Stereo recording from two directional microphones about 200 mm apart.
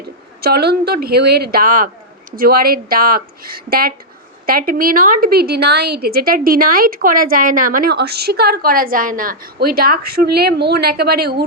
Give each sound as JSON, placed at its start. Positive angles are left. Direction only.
{"t": 0.4, "sound": "a woman's voice", "side_deg": -55}